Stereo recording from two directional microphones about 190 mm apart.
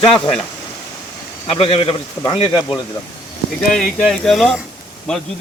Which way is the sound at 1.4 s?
30° left (ahead or behind).